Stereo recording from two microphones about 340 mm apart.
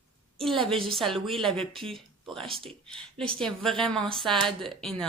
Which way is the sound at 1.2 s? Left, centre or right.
Centre.